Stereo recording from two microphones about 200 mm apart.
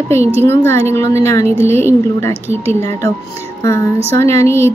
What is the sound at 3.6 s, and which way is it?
A woman's voice, 15° left (ahead or behind).